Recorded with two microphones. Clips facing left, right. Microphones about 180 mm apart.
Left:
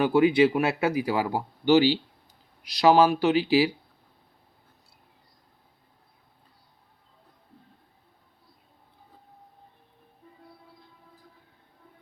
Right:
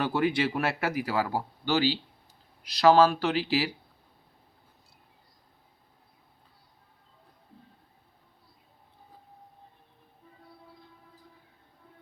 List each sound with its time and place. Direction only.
0.0 s a man's voice: 15° left (ahead or behind)